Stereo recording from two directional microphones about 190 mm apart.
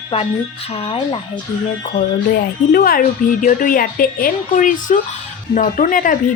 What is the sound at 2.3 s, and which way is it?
A woman's voice, 50° left (ahead or behind).